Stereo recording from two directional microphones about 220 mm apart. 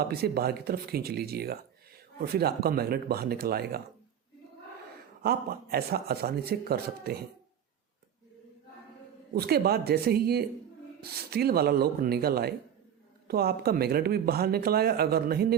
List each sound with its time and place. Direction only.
0.1 s speech: 45° right (ahead or behind)
5.2 s speech: 45° right (ahead or behind)
9.3 s speech: 45° right (ahead or behind)